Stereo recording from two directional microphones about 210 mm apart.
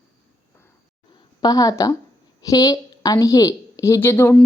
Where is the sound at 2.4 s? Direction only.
15° left (ahead or behind).